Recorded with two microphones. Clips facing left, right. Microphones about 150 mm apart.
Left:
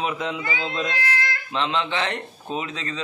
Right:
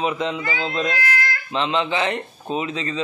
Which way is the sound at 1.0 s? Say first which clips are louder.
Right 2 dB; 25° left (ahead or behind).